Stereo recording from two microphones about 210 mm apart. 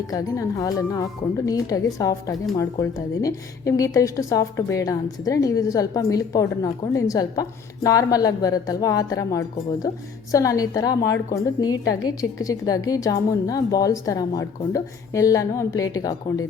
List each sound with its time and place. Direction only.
0.1 s a woman's voice: 15° left (ahead or behind)